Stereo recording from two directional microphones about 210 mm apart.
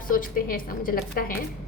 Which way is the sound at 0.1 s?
40° left (ahead or behind).